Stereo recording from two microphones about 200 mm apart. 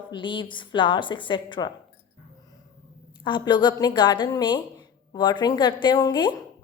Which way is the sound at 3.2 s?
25° left (ahead or behind).